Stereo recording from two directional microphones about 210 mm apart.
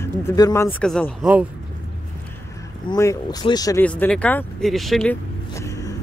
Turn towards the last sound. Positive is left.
turn(degrees=15)  # may be behind; listen again after turning